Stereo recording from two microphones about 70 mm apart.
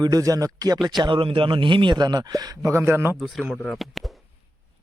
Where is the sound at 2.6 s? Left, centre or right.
Right.